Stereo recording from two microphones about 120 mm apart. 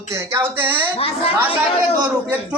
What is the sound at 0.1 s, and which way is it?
Speech, 25° right (ahead or behind).